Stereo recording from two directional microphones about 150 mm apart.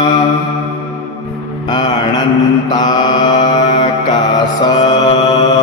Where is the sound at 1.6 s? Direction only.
30° left (ahead or behind).